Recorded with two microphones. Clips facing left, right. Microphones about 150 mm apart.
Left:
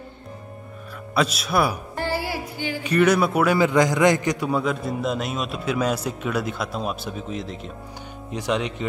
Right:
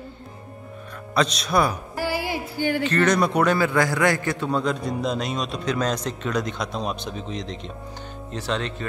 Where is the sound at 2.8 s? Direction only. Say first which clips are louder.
Left 4 dB; 10° left (ahead or behind).